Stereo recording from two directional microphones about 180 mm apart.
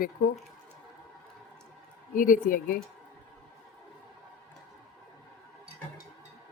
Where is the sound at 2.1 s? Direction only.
50° left (ahead or behind).